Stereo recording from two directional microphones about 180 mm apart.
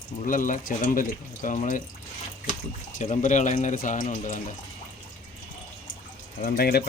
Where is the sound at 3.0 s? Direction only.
45° left (ahead or behind).